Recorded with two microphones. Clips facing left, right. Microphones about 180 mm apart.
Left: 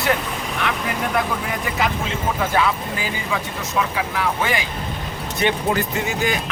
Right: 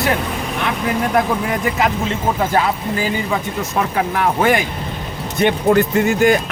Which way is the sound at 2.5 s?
40° right (ahead or behind).